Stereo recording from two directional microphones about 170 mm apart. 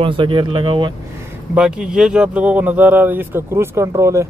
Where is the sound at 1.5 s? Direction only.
5° right (ahead or behind).